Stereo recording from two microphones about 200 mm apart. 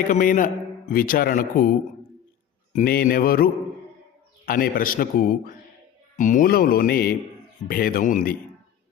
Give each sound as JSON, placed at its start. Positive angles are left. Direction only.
{"t": 0.1, "sound": "a man's voice", "side_deg": 40}
{"t": 2.7, "sound": "a man's voice", "side_deg": 50}